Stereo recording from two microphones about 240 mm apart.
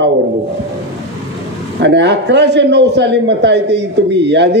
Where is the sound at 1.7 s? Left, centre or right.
Right.